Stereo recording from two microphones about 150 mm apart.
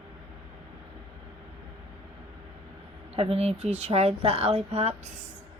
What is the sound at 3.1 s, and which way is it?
Speech, 40° right (ahead or behind).